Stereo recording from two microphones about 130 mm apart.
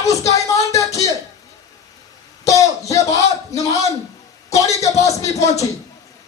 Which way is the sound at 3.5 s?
25° left (ahead or behind).